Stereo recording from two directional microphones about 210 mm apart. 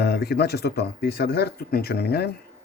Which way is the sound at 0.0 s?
50° left (ahead or behind).